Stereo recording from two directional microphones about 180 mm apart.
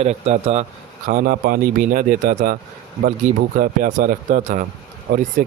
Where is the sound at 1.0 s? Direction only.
50° right (ahead or behind).